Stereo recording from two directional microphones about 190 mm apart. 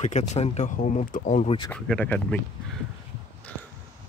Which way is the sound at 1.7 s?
5° left (ahead or behind).